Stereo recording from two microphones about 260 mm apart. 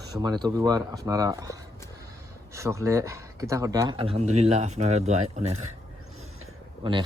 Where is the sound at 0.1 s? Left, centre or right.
Centre.